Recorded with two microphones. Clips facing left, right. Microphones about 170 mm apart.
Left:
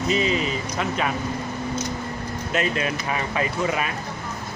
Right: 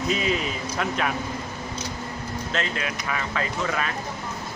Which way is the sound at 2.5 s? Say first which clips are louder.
Left 6 dB; 15° left (ahead or behind).